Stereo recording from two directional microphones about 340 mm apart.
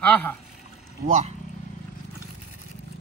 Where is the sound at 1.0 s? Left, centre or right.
Right.